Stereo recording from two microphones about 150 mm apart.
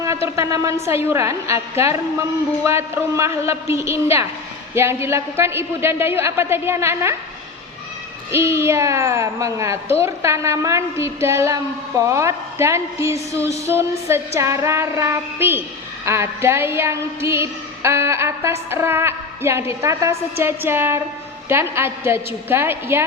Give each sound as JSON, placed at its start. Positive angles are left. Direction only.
{"t": 0.0, "sound": "a woman's voice", "side_deg": -20}
{"t": 8.3, "sound": "a woman's voice", "side_deg": -15}